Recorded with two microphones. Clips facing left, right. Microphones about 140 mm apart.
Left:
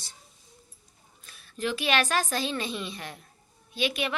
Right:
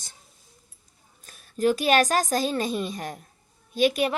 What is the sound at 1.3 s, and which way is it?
A woman's voice, 45° right (ahead or behind).